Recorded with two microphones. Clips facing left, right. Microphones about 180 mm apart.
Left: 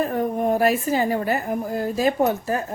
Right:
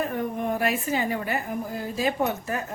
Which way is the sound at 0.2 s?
40° left (ahead or behind).